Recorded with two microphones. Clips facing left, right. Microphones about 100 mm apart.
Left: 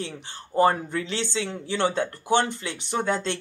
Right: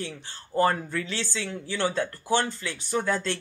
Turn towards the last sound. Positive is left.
turn(degrees=20)  # may be behind; listen again after turning